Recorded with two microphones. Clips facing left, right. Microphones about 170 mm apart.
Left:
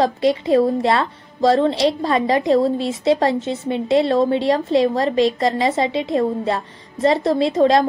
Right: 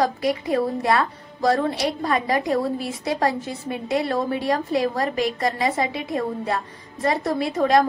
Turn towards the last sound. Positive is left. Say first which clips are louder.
# left 4 dB
turn(degrees=25)  # may be behind; listen again after turning